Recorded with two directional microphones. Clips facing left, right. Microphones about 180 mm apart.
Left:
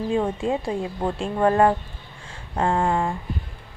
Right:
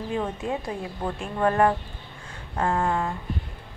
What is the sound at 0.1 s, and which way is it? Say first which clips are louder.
A woman's voice: left 4 dB; 25° left (ahead or behind).